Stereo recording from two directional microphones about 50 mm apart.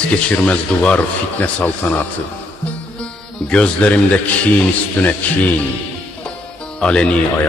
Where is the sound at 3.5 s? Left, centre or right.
Left.